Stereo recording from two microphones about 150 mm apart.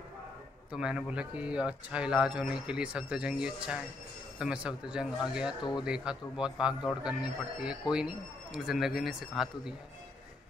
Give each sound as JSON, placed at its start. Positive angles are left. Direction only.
{"t": 0.7, "sound": "a man's voice", "side_deg": -5}
{"t": 5.6, "sound": "speech", "side_deg": 30}
{"t": 5.9, "sound": "a man's voice", "side_deg": -5}